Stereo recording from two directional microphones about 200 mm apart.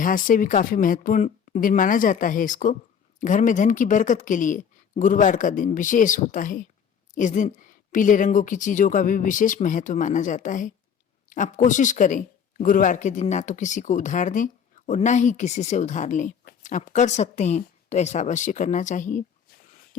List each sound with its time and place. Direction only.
0.0 s speech: 40° left (ahead or behind)